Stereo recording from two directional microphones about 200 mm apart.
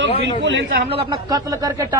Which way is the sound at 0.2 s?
65° right (ahead or behind).